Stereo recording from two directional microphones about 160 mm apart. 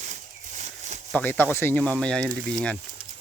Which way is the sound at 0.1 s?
45° right (ahead or behind).